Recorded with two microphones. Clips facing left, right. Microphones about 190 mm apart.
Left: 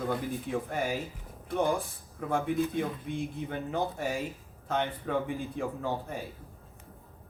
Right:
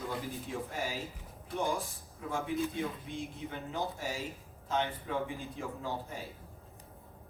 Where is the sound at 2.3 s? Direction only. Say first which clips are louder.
Left 5 dB; 55° left (ahead or behind).